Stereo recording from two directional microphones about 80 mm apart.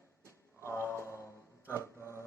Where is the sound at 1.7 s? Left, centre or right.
Left.